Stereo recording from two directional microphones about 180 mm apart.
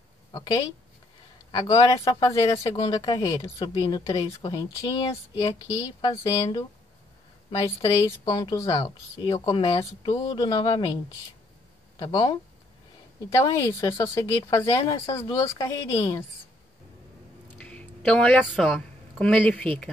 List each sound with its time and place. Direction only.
1.7 s speech: 20° left (ahead or behind)
7.8 s speech: 25° left (ahead or behind)
12.0 s speech: 20° left (ahead or behind)
17.6 s a sound: 5° left (ahead or behind)
18.4 s speech: centre (ahead or behind)